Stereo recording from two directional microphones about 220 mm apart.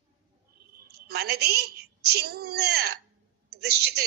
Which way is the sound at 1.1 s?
45° right (ahead or behind).